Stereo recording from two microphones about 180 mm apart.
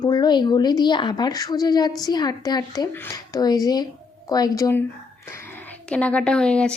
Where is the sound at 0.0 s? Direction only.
25° left (ahead or behind).